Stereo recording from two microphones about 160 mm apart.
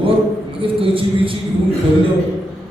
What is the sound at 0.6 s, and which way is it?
Speech, 35° right (ahead or behind).